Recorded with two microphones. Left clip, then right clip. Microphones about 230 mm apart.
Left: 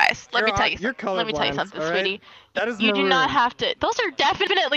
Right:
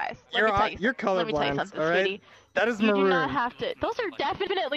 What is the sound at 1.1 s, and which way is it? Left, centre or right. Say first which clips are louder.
Speech: left 3 dB; centre.